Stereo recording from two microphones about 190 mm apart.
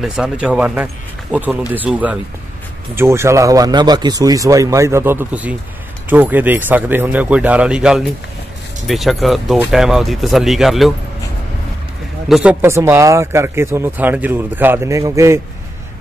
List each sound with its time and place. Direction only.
0.0 s speech: 5° right (ahead or behind)
12.3 s speech: 5° right (ahead or behind)
12.6 s speech: 15° right (ahead or behind)